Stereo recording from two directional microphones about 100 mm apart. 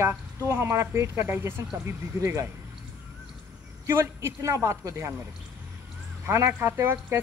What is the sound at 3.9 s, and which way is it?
A woman's voice, 30° right (ahead or behind).